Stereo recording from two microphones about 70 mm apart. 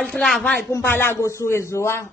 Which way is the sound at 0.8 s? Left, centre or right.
Left.